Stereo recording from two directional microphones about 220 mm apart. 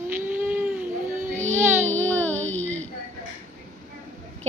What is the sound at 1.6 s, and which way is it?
Speech, 10° right (ahead or behind).